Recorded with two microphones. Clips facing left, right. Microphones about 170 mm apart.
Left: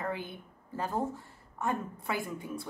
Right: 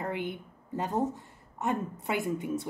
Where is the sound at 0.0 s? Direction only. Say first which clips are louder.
Right 3 dB; 20° right (ahead or behind).